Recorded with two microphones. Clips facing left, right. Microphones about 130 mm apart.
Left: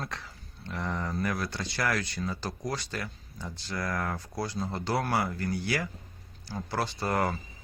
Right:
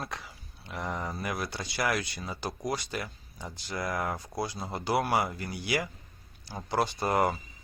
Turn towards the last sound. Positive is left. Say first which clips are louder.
# right 2 dB
turn(degrees=-15)  # may be behind; listen again after turning